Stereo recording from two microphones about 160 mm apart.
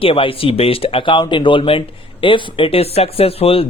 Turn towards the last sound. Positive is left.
turn(degrees=35)  # may be behind; listen again after turning